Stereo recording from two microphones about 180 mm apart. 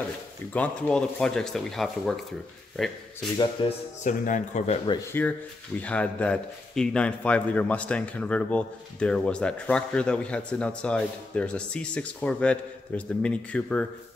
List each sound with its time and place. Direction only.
0.5 s speech: 5° left (ahead or behind)
3.6 s speech: 30° left (ahead or behind)
4.0 s speech: 40° left (ahead or behind)
5.2 s a man's voice: 10° left (ahead or behind)